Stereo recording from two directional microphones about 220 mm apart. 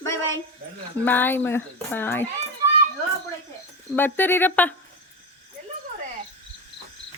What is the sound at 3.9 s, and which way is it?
Speech, 10° left (ahead or behind).